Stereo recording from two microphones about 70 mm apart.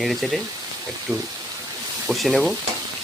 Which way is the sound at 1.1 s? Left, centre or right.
Right.